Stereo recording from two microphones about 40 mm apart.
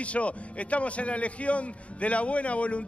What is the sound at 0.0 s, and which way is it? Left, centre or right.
A man's voice, left.